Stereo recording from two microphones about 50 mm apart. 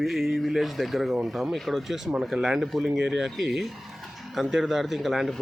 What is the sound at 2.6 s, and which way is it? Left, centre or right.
Speech, centre.